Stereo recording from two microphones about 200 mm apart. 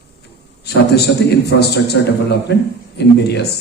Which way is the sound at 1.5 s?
55° left (ahead or behind).